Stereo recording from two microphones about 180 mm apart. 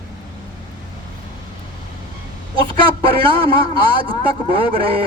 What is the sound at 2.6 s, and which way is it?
A man's voice, 30° right (ahead or behind).